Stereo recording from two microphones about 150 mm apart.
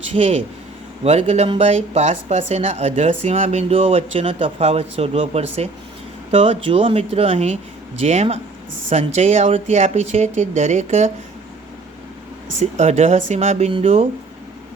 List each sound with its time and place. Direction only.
1.0 s speech: 45° right (ahead or behind)
12.5 s speech: 50° right (ahead or behind)